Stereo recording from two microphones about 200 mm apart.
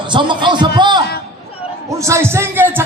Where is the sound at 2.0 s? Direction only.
15° right (ahead or behind).